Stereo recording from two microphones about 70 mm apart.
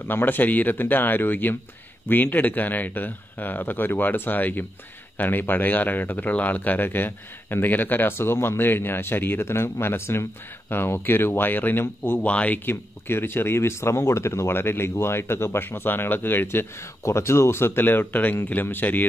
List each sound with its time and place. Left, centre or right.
0.0 s speech: left
12.3 s speech: centre
12.6 s speech: left